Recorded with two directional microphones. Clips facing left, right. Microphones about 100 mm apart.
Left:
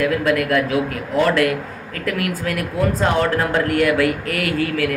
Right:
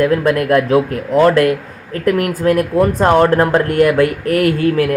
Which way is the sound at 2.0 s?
35° right (ahead or behind).